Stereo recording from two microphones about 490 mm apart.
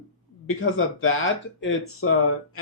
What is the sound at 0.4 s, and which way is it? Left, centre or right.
Speech, left.